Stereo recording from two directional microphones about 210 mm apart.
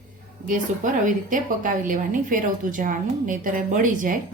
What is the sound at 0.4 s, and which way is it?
A woman's voice, 40° right (ahead or behind).